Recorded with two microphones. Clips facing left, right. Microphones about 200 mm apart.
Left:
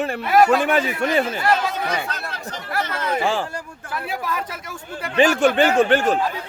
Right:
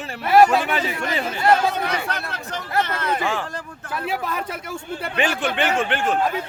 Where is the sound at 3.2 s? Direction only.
30° left (ahead or behind).